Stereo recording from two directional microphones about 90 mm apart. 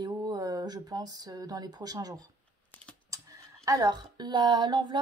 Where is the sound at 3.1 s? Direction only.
35° right (ahead or behind).